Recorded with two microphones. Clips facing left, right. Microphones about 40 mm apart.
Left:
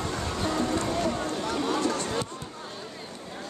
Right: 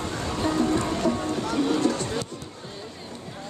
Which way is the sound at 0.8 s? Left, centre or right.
Centre.